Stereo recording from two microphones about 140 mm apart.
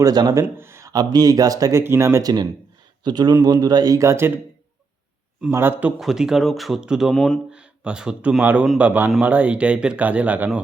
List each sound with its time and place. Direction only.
0.0 s speech: 30° right (ahead or behind)
0.5 s speech: 20° right (ahead or behind)
5.5 s speech: 15° right (ahead or behind)
6.0 s speech: 5° right (ahead or behind)